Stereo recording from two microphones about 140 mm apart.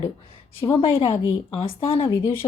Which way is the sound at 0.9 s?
20° left (ahead or behind).